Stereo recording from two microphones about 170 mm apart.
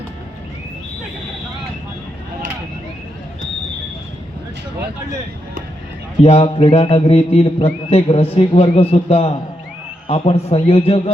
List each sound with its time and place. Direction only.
6.2 s a man's voice: 35° left (ahead or behind)